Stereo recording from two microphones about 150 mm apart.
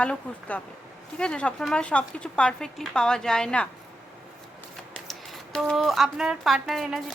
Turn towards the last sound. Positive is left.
turn(degrees=0)  # may be behind; listen again after turning